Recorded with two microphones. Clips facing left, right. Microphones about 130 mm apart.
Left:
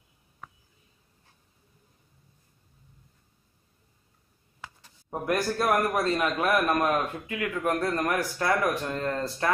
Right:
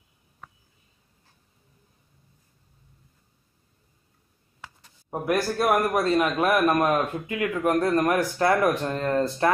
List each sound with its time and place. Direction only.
5.1 s a man's voice: 10° right (ahead or behind); by 9.5 s 25° right (ahead or behind)